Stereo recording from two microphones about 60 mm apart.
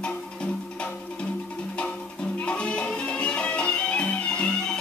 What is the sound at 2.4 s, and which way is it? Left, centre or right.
Music, centre.